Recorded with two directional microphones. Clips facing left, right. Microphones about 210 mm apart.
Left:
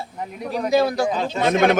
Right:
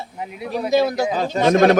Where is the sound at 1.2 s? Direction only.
45° right (ahead or behind).